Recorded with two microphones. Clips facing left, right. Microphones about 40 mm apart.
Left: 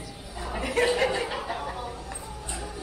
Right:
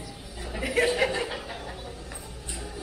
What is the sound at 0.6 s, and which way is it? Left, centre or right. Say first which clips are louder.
Chuckle: even; centre.